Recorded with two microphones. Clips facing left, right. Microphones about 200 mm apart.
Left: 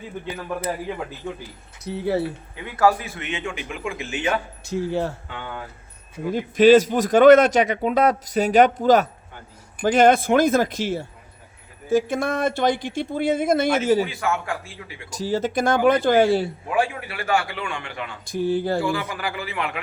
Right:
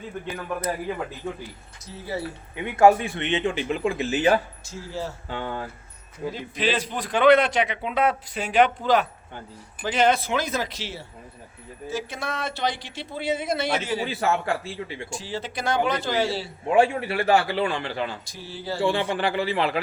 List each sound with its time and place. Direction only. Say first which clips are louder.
1.8 s speech: left 9 dB; 60° left (ahead or behind)
2.6 s a man's voice: right 3 dB; 20° right (ahead or behind)
4.6 s speech: left 9 dB; 60° left (ahead or behind)
5.3 s a man's voice: right 3 dB; 35° right (ahead or behind)
6.3 s a man's voice: left 14 dB; 45° left (ahead or behind)
14.1 s a man's voice: right 1 dB; 35° right (ahead or behind)
15.2 s a man's voice: left 11 dB; 45° left (ahead or behind)
16.6 s a man's voice: right 4 dB; 25° right (ahead or behind)
18.3 s a man's voice: left 11 dB; 50° left (ahead or behind)
18.8 s a man's voice: right 2 dB; 30° right (ahead or behind)